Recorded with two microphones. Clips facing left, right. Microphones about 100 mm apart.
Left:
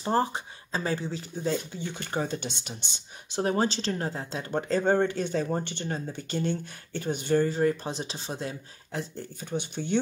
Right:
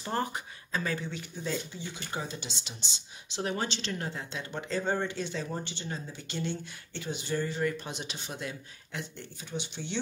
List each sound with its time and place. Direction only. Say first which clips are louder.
0.0 s speech: left 6 dB; 30° left (ahead or behind)
1.8 s speech: left 6 dB; 55° left (ahead or behind)